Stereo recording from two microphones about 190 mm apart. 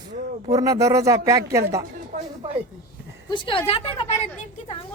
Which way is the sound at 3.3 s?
25° left (ahead or behind).